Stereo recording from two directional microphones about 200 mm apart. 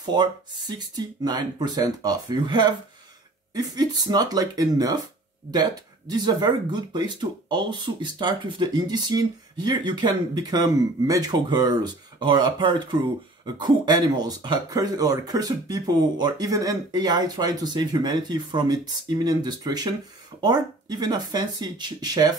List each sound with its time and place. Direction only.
0.0 s speech: 20° right (ahead or behind)